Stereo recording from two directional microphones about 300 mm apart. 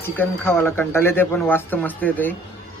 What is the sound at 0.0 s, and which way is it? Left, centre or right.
Speech, centre.